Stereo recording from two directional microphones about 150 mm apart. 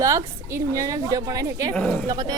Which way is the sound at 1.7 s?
5° left (ahead or behind).